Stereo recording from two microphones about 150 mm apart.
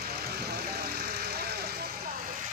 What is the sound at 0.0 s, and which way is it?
Vehicle, 90° right.